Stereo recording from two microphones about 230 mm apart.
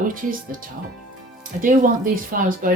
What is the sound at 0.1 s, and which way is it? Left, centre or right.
Speech, right.